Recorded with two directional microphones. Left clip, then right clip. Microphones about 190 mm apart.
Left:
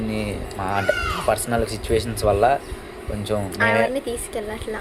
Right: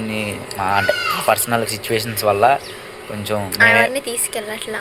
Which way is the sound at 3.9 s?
15° left (ahead or behind).